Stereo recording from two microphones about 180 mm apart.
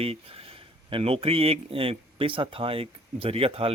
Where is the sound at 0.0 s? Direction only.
35° right (ahead or behind).